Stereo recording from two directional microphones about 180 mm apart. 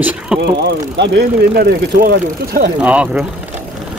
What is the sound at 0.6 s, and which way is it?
Speech, 70° right (ahead or behind).